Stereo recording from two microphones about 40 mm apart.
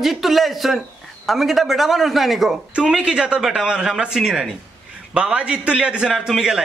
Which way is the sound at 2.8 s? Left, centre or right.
Right.